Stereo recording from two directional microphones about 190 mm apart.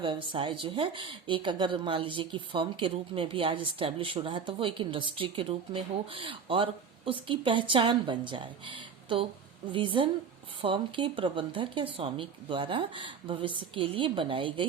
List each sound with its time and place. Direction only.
0.0 s speech: 25° right (ahead or behind)